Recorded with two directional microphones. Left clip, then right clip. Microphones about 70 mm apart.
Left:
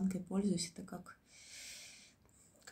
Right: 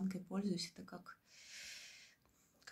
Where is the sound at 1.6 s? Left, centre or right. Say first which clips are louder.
Even; centre.